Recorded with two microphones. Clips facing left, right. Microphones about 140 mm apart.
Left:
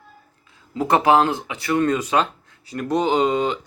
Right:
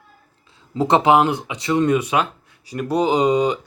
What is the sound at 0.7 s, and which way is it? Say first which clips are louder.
Speech: right 2 dB; 20° right (ahead or behind).